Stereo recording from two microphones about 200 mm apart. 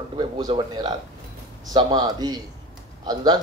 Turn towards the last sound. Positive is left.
turn(degrees=-20)  # may be behind; listen again after turning